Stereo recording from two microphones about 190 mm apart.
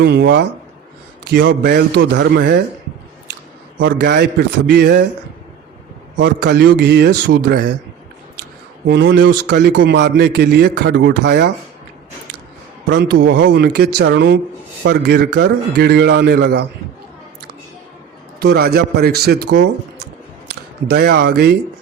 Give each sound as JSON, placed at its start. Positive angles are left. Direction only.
{"t": 0.0, "sound": "a man's voice", "side_deg": -60}
{"t": 1.2, "sound": "a sound", "side_deg": -70}
{"t": 1.6, "sound": "a man's voice", "side_deg": -65}
{"t": 3.8, "sound": "a man's voice", "side_deg": -65}
{"t": 6.1, "sound": "a man's voice", "side_deg": -65}
{"t": 8.9, "sound": "speech", "side_deg": -85}
{"t": 9.2, "sound": "a man's voice", "side_deg": -60}
{"t": 12.9, "sound": "a man's voice", "side_deg": -65}
{"t": 13.4, "sound": "a man's voice", "side_deg": -55}
{"t": 18.3, "sound": "a man's voice", "side_deg": -55}